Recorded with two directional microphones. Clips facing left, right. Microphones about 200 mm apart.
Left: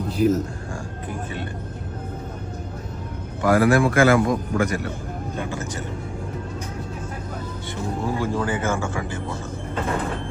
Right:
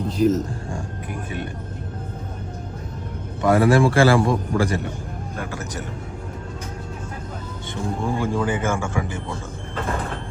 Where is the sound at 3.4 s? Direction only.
25° right (ahead or behind).